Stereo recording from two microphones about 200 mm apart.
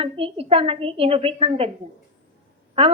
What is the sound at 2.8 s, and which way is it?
Speech, 30° right (ahead or behind).